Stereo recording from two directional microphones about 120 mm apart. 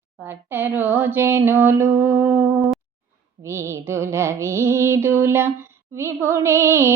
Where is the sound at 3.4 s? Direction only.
25° right (ahead or behind).